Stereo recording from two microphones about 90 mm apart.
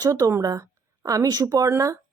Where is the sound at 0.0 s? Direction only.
35° right (ahead or behind).